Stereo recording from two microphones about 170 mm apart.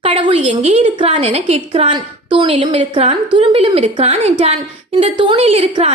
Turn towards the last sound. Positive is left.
turn(degrees=-35)  # may be behind; listen again after turning